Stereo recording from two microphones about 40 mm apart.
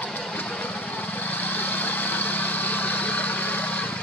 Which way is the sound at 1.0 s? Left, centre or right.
Left.